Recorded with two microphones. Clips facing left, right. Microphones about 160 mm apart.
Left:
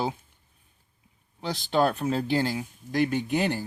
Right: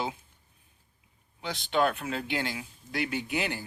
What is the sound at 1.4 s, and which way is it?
Speech, 40° left (ahead or behind).